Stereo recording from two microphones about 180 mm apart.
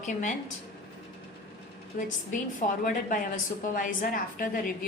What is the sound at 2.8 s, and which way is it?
A woman's voice, 50° left (ahead or behind).